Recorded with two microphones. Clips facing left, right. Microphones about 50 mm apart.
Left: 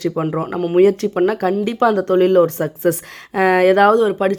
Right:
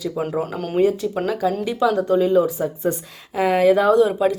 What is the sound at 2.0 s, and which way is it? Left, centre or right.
Speech, left.